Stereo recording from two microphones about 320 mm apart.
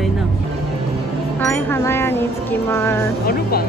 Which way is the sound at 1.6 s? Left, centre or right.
Centre.